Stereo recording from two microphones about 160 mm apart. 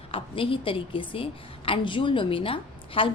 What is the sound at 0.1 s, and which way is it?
A woman's voice, 35° left (ahead or behind).